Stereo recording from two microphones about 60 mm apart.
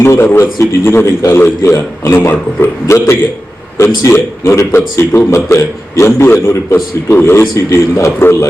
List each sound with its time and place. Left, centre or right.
0.0 s a man's voice: left